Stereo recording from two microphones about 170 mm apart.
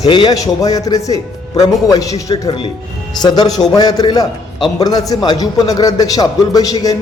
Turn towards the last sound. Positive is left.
turn(degrees=20)  # may be behind; listen again after turning